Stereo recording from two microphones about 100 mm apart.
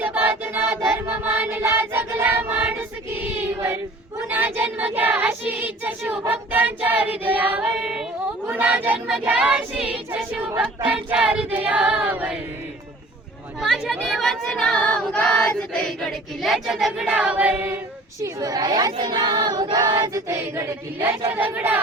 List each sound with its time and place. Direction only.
0.0 s child singing: 20° right (ahead or behind)
1.2 s choir: 20° right (ahead or behind)
4.3 s child singing: 20° right (ahead or behind)
13.6 s child singing: 5° right (ahead or behind)
18.2 s a woman's voice: 35° right (ahead or behind)
18.9 s child singing: 50° right (ahead or behind)
20.2 s child singing: 30° right (ahead or behind)